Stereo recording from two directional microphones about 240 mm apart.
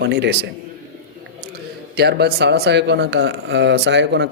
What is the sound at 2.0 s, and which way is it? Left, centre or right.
Speech, right.